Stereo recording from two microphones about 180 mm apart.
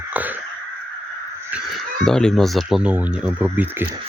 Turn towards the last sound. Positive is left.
turn(degrees=-10)  # may be behind; listen again after turning